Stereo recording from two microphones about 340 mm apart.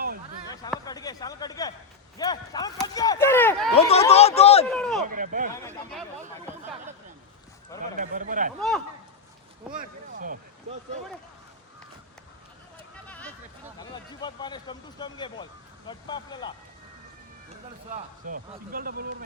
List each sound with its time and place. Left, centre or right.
0.9 s speech: centre
3.8 s speech: centre
4.6 s speech: centre
5.0 s speech: right
5.5 s speech: centre
7.9 s speech: right
9.7 s speech: right
13.1 s a sound: centre
13.7 s speech: centre
17.9 s speech: right